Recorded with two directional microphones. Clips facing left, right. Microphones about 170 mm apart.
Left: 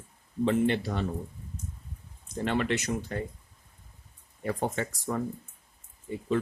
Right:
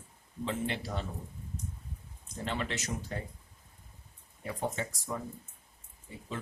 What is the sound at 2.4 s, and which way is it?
Speech, 60° left (ahead or behind).